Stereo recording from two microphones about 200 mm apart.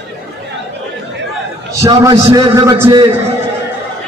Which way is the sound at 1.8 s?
15° right (ahead or behind).